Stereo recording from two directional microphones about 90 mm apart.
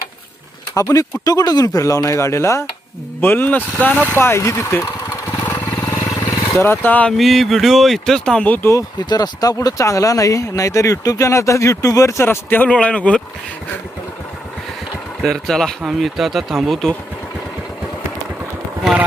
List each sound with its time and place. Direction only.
0.7 s speech: 35° left (ahead or behind); by 4.0 s 15° left (ahead or behind)
4.1 s vehicle: 25° left (ahead or behind)
6.6 s speech: 25° left (ahead or behind)
7.2 s speech: centre (ahead or behind); by 8.7 s 20° left (ahead or behind)
8.7 s speech: 45° left (ahead or behind); by 12.6 s 25° left (ahead or behind)
12.6 s speech: 10° left (ahead or behind)
15.2 s speech: 5° left (ahead or behind)